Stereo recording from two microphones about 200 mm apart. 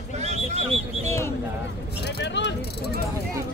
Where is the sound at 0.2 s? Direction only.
35° right (ahead or behind).